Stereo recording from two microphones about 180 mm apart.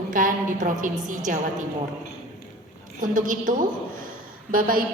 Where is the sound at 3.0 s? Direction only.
50° right (ahead or behind).